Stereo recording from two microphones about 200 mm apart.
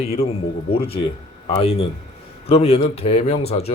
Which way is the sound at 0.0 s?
30° left (ahead or behind).